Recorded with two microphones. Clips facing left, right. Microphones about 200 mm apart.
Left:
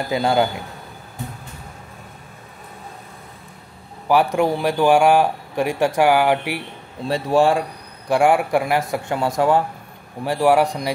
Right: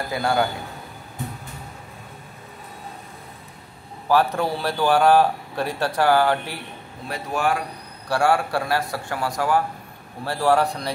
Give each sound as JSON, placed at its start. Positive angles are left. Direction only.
{"t": 0.1, "sound": "speech", "side_deg": 20}
{"t": 4.1, "sound": "speech", "side_deg": 15}
{"t": 7.1, "sound": "speech", "side_deg": 30}
{"t": 8.1, "sound": "speech", "side_deg": 15}